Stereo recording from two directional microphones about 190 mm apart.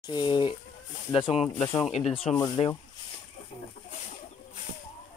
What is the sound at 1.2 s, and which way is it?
Speech, 5° right (ahead or behind).